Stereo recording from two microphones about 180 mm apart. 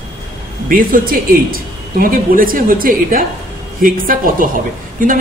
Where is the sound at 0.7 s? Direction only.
55° right (ahead or behind).